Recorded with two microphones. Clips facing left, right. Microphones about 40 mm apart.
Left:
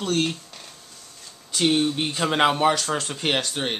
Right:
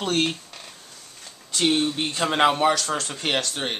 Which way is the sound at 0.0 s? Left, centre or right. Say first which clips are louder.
Even; right.